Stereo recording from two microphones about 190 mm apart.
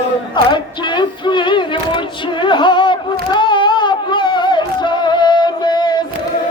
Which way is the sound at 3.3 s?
25° left (ahead or behind).